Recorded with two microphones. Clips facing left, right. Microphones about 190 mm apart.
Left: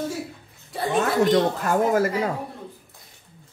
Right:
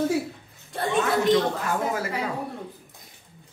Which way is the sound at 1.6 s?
45° left (ahead or behind).